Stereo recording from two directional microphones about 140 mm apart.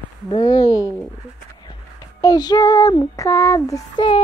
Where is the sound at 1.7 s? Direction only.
25° left (ahead or behind).